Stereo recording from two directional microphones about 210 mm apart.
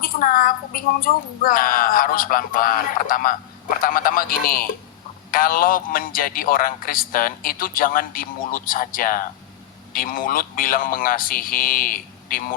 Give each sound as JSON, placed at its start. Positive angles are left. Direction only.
{"t": 0.0, "sound": "a man's voice", "side_deg": 40}